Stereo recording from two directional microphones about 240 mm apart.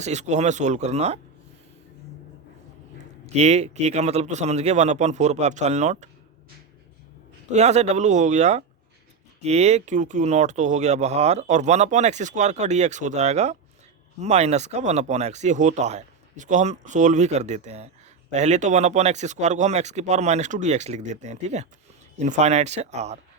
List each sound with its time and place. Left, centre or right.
0.0 s speech: right
3.3 s speech: right
7.5 s speech: right